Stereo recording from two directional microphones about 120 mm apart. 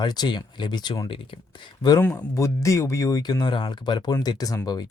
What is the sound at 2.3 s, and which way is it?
Speech, 25° left (ahead or behind).